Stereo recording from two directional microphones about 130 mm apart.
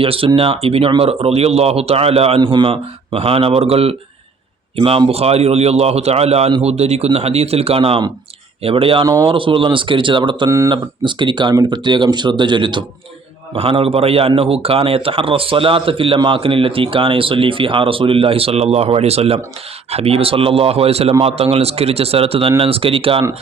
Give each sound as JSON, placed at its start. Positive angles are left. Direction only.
{"t": 0.0, "sound": "a man's voice", "side_deg": -45}
{"t": 2.4, "sound": "a man's voice", "side_deg": -35}
{"t": 10.5, "sound": "speech", "side_deg": -25}
{"t": 11.0, "sound": "a man's voice", "side_deg": -35}